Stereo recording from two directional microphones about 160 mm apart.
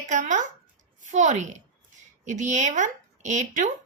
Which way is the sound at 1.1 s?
50° right (ahead or behind).